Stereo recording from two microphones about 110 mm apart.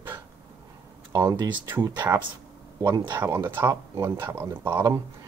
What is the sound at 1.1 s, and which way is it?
Speech, 25° right (ahead or behind).